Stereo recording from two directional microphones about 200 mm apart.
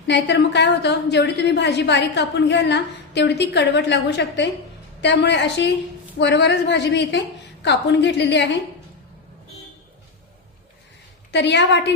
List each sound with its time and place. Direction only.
0.1 s a woman's voice: 60° left (ahead or behind)
11.3 s a woman's voice: 60° left (ahead or behind)